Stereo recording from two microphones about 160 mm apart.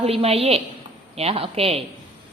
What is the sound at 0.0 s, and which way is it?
A woman's voice, 40° right (ahead or behind).